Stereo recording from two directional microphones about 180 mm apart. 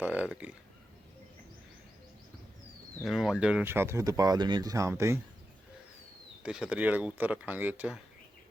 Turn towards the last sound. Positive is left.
turn(degrees=-10)  # may be behind; listen again after turning